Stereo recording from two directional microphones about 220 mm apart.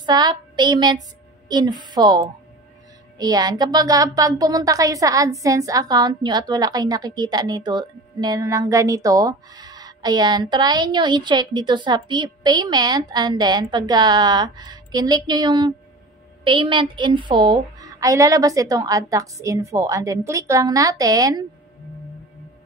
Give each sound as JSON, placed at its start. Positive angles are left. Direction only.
{"t": 0.0, "sound": "child singing", "side_deg": -20}
{"t": 1.5, "sound": "a woman's voice", "side_deg": -20}